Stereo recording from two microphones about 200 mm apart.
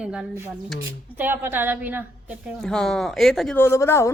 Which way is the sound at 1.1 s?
10° right (ahead or behind).